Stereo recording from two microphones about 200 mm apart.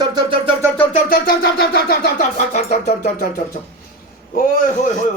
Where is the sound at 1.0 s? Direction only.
45° left (ahead or behind).